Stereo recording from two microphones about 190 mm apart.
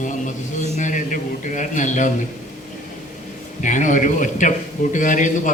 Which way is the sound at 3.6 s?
40° left (ahead or behind).